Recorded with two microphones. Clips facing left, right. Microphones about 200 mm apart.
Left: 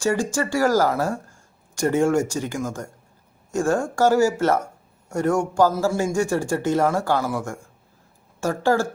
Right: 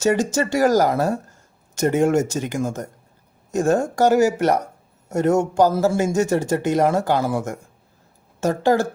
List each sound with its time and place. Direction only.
0.0 s speech: 20° right (ahead or behind)